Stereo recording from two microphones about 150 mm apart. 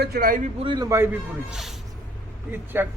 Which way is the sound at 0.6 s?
35° right (ahead or behind).